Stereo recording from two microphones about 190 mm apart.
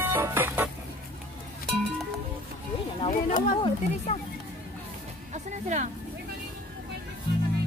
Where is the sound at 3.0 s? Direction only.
25° left (ahead or behind).